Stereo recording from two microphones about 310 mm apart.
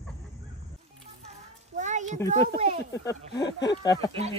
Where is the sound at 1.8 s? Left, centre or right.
Right.